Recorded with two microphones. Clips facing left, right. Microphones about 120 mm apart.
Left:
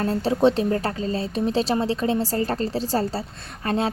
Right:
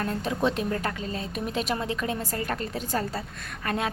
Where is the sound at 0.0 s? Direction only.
35° left (ahead or behind).